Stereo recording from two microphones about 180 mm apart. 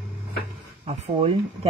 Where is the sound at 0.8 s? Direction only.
35° right (ahead or behind).